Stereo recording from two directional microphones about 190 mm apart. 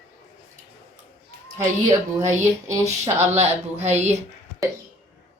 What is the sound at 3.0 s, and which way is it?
Speech, 35° right (ahead or behind).